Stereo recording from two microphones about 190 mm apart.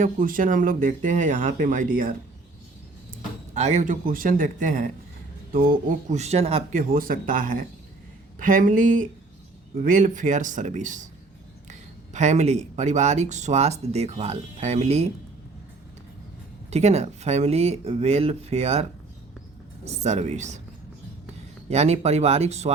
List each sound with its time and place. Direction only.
0.0 s speech: 45° right (ahead or behind)
3.5 s speech: 35° right (ahead or behind)
16.6 s speech: 35° right (ahead or behind)
21.7 s speech: 35° right (ahead or behind)